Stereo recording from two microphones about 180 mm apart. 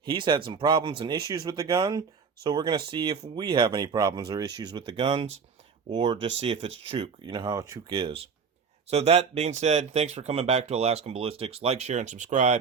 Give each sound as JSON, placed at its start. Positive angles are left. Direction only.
{"t": 0.0, "sound": "speech", "side_deg": -25}